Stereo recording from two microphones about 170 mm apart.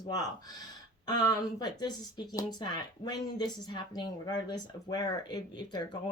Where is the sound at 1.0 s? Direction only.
20° left (ahead or behind).